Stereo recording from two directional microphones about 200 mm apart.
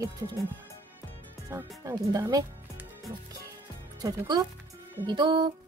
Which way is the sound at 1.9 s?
15° right (ahead or behind).